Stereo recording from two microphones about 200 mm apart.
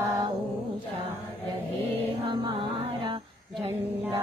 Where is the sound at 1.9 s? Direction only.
25° right (ahead or behind).